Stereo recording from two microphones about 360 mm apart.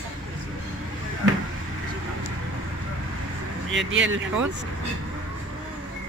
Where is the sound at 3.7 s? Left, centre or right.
Right.